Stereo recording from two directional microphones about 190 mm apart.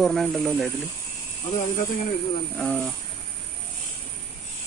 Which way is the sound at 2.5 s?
5° left (ahead or behind).